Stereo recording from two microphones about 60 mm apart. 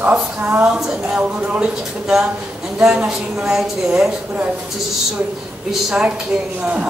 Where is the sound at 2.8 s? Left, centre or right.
Centre.